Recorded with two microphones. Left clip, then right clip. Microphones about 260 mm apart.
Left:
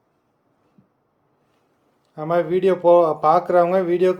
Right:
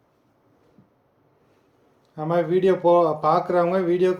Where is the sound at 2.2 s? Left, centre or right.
Centre.